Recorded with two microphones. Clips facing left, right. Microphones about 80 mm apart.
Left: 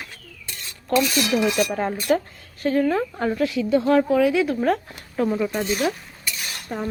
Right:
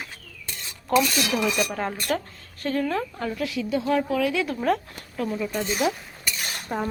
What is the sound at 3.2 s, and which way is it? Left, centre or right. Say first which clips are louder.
Speech: left 6 dB; left.